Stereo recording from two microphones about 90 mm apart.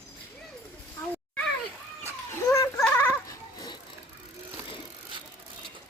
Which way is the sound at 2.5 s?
30° left (ahead or behind).